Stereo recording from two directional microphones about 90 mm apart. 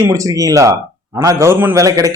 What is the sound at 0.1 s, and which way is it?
A man's voice, 40° right (ahead or behind).